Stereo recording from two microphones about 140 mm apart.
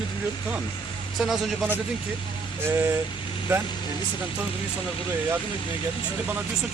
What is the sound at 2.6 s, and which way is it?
Speech, 15° right (ahead or behind).